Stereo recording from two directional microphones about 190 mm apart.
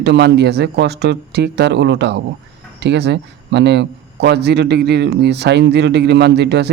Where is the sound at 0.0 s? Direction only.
60° right (ahead or behind).